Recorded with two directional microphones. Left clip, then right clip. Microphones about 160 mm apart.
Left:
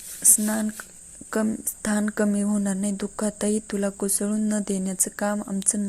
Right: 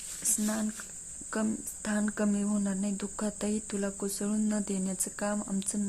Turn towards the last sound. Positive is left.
turn(degrees=20)  # may be behind; listen again after turning